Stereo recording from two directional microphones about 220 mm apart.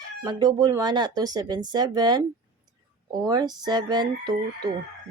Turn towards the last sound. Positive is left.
turn(degrees=-20)  # may be behind; listen again after turning